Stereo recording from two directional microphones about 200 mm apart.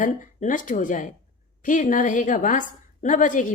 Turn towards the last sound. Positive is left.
turn(degrees=40)  # may be behind; listen again after turning